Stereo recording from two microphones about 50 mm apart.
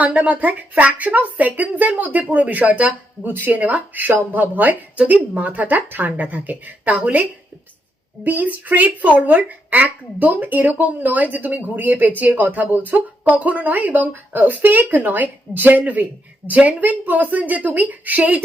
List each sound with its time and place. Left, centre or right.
0.0 s speech: right